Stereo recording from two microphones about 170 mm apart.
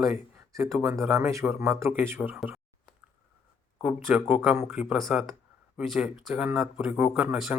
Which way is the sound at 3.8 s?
5° right (ahead or behind).